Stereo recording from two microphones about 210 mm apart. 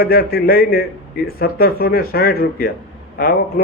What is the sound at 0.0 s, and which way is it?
Speech, 45° left (ahead or behind).